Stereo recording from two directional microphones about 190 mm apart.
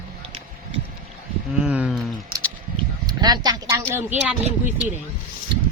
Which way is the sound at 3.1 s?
20° right (ahead or behind).